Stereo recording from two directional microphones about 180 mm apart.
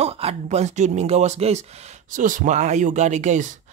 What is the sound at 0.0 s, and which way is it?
Speech, 35° right (ahead or behind).